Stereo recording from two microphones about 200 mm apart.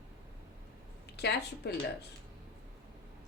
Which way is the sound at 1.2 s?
55° left (ahead or behind).